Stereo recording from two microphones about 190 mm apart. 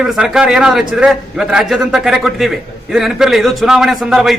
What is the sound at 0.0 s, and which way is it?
A man's voice, 5° right (ahead or behind).